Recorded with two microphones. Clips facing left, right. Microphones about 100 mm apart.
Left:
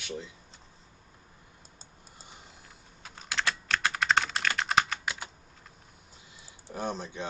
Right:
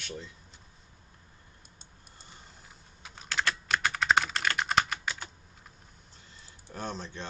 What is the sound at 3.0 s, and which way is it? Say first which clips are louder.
Computer keyboard: right 1 dB; centre (ahead or behind).